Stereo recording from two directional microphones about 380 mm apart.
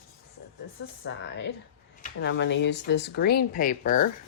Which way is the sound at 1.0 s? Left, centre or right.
Left.